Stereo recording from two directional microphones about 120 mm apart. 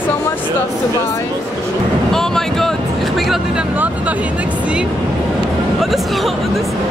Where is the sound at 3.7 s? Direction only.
10° right (ahead or behind).